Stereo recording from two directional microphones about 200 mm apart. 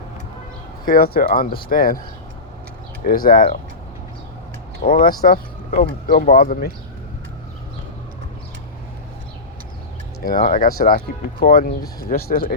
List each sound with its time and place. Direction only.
0.9 s speech: 45° left (ahead or behind)
3.2 s speech: 45° left (ahead or behind)
4.8 s speech: 45° left (ahead or behind)
10.2 s speech: 45° left (ahead or behind)